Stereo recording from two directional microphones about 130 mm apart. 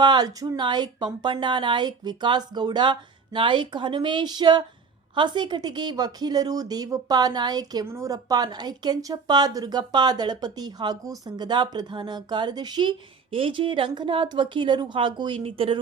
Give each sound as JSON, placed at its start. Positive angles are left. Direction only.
{"t": 0.0, "sound": "a woman's voice", "side_deg": -35}